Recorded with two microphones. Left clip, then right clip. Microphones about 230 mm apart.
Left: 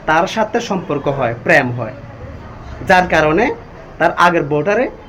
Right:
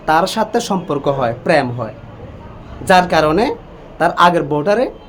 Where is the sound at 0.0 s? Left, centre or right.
Centre.